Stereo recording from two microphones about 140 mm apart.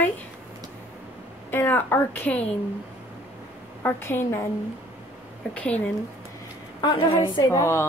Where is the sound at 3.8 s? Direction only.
15° left (ahead or behind).